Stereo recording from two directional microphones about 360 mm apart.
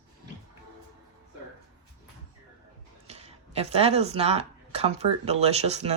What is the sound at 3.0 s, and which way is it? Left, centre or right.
Speech, centre.